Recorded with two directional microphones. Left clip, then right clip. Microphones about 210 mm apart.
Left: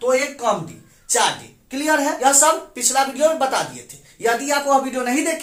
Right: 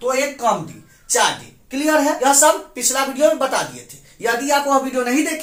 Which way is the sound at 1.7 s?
20° left (ahead or behind).